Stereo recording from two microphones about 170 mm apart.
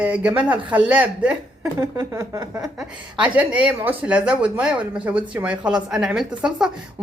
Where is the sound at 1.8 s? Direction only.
15° right (ahead or behind).